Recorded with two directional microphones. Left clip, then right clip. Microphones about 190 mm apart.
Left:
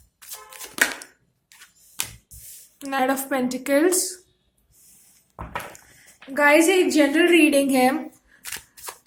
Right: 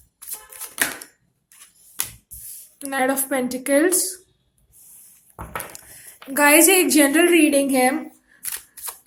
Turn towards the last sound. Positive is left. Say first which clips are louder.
# right 1 dB
turn(degrees=0)  # may be behind; listen again after turning